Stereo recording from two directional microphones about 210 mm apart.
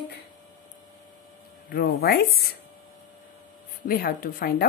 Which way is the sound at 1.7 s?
50° left (ahead or behind).